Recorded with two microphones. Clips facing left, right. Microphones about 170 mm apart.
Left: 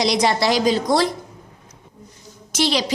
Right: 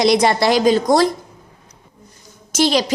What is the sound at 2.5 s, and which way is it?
Speech, 45° right (ahead or behind).